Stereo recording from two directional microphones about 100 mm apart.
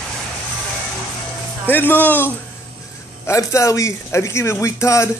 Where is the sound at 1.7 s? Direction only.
20° left (ahead or behind).